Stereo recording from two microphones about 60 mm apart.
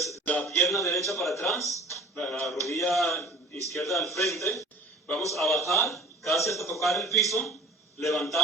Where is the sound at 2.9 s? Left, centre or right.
Centre.